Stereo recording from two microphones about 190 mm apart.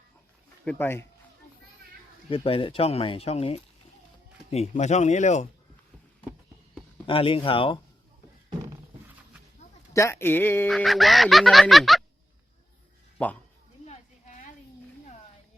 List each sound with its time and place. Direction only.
0.6 s speech: 10° left (ahead or behind)
2.3 s speech: 30° left (ahead or behind)
7.1 s speech: 30° left (ahead or behind)
9.9 s speech: 15° left (ahead or behind)
10.7 s music: centre (ahead or behind)
13.2 s speech: 5° left (ahead or behind)
13.8 s a sound: 35° left (ahead or behind)